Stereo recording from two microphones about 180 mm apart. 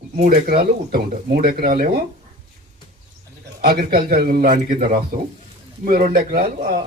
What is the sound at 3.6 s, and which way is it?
A man's voice, 55° right (ahead or behind).